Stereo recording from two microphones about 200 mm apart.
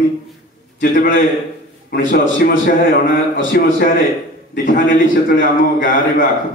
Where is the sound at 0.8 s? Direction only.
45° left (ahead or behind).